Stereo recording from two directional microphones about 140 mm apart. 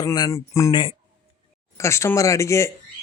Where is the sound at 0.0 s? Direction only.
25° left (ahead or behind).